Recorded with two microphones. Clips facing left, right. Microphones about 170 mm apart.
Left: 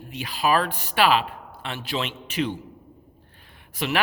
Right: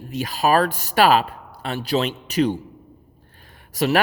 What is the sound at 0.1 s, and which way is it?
Speech, 40° right (ahead or behind).